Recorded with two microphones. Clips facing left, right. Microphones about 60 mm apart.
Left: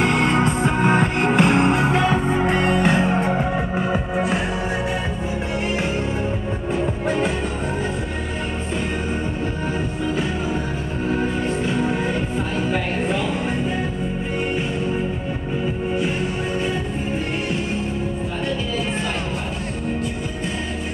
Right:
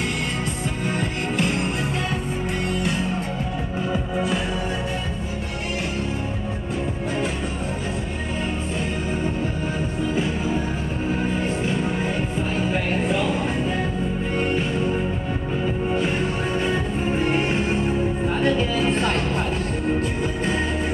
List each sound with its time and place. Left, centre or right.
0.0 s music: left